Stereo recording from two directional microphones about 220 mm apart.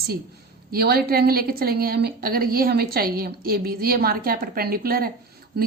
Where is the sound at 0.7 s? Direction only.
45° right (ahead or behind).